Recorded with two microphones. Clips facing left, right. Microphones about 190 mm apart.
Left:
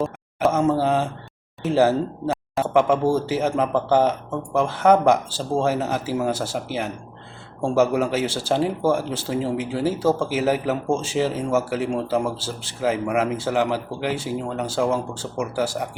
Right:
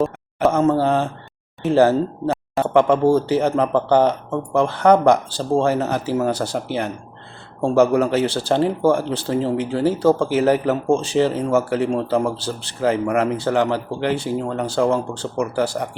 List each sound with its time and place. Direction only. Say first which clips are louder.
0.0 s speech: right 3 dB; 5° left (ahead or behind)